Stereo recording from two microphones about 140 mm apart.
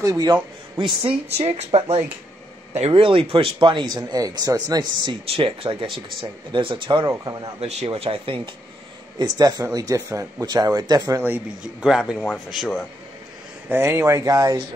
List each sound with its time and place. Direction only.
0.0 s speech: 25° right (ahead or behind)
5.2 s speech: 40° right (ahead or behind)
7.6 s a man's voice: 45° right (ahead or behind)
9.2 s speech: 25° right (ahead or behind)
12.2 s speech: centre (ahead or behind)
13.7 s speech: 20° right (ahead or behind)